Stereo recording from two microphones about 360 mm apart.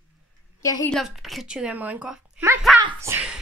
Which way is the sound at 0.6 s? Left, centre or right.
Centre.